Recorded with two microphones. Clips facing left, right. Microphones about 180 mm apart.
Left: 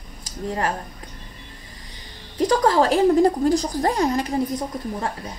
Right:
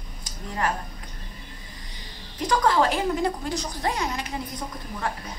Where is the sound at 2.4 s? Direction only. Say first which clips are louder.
Left 4 dB; 35° left (ahead or behind).